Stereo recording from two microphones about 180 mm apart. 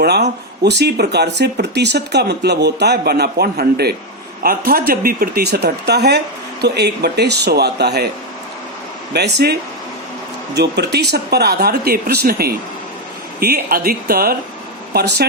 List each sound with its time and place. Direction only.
0.0 s speech: 65° right (ahead or behind)
9.1 s speech: 65° right (ahead or behind)